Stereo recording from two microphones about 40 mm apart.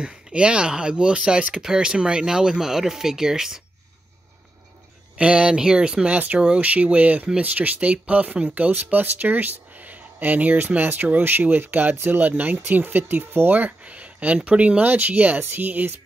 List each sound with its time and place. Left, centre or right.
0.0 s speech: right
5.1 s speech: right
6.1 s speech: right
13.8 s speech: right